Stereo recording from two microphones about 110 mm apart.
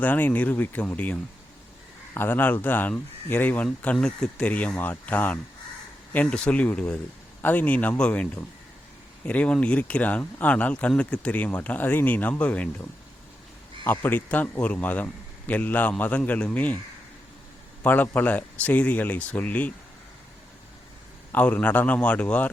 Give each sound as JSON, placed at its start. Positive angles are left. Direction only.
{"t": 0.0, "sound": "speech", "side_deg": 15}
{"t": 17.8, "sound": "speech", "side_deg": 15}
{"t": 21.3, "sound": "speech", "side_deg": 15}